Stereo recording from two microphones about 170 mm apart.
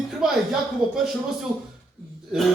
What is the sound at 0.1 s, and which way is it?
Speech, centre (ahead or behind).